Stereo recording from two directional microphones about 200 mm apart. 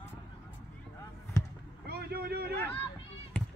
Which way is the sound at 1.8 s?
50° right (ahead or behind).